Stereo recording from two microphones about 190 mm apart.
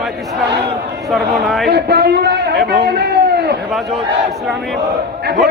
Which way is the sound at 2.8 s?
60° right (ahead or behind).